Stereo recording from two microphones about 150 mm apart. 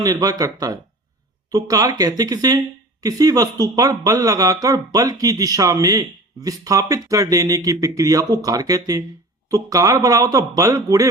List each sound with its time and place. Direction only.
0.0 s speech: 25° right (ahead or behind)